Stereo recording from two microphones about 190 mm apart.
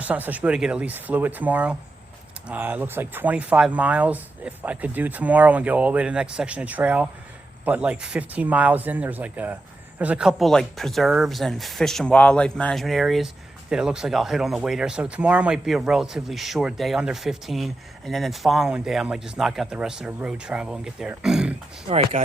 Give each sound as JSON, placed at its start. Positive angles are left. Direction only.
{"t": 0.0, "sound": "speech", "side_deg": -10}
{"t": 21.8, "sound": "speech", "side_deg": -35}